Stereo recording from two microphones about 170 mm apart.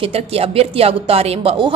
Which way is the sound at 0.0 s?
35° right (ahead or behind).